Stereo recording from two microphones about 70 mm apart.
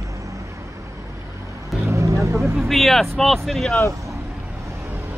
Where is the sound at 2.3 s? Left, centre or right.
Right.